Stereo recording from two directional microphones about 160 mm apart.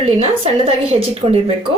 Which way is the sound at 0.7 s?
35° right (ahead or behind).